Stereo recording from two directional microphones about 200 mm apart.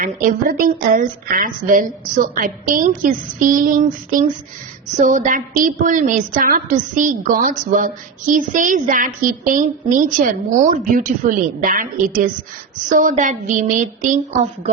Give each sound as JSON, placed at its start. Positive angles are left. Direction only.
{"t": 0.0, "sound": "a woman's voice", "side_deg": -40}